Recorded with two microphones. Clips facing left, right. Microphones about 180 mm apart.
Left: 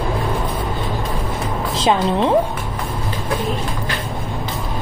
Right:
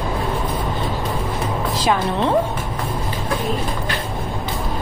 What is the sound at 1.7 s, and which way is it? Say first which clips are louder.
Speech: left 4 dB; 20° left (ahead or behind).